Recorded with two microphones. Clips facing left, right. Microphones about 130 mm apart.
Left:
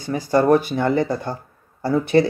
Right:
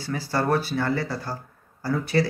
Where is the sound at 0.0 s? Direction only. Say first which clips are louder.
Left 8 dB; 20° left (ahead or behind).